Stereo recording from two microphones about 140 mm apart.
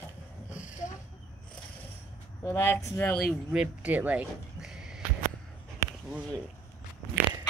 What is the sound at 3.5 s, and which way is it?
Speech, 5° right (ahead or behind).